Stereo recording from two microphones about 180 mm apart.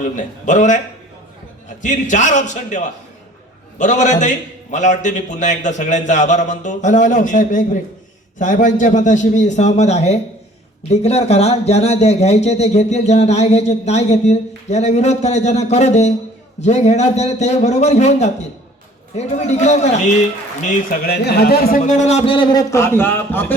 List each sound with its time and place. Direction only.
0.0 s a man's voice: 45° left (ahead or behind)
1.8 s a man's voice: 45° left (ahead or behind)
21.1 s speech: 65° left (ahead or behind); by 23.6 s 10° left (ahead or behind)